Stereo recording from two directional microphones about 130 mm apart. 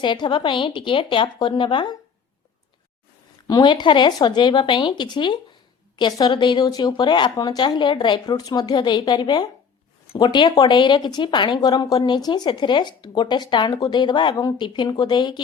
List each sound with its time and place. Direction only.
0.0 s speech: 35° left (ahead or behind)
3.4 s speech: 35° left (ahead or behind)